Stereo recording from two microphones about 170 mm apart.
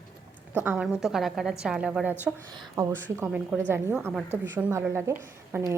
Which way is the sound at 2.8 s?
20° right (ahead or behind).